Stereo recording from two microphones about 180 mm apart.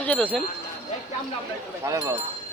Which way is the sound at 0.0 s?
10° left (ahead or behind).